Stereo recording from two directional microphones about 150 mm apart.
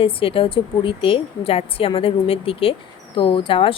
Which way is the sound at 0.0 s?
40° left (ahead or behind).